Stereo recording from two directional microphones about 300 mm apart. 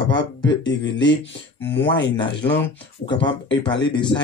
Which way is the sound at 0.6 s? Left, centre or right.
Left.